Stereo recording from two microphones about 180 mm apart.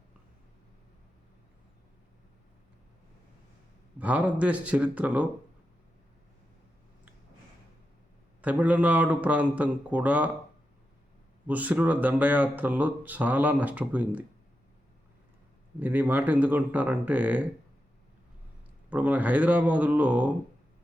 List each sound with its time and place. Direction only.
3.9 s speech: 5° right (ahead or behind)
8.4 s speech: 10° right (ahead or behind)
11.4 s speech: 10° right (ahead or behind)
15.8 s speech: 10° right (ahead or behind)
18.9 s speech: 10° right (ahead or behind)